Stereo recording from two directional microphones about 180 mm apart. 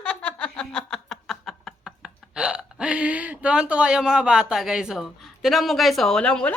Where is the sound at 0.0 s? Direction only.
5° left (ahead or behind).